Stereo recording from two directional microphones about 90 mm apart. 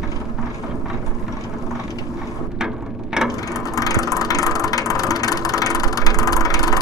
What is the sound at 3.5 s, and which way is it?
Vehicle, 40° left (ahead or behind).